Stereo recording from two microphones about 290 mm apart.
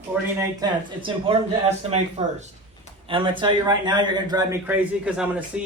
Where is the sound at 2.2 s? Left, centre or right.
Centre.